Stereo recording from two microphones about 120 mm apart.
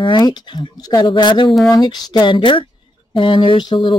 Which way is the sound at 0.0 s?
40° left (ahead or behind).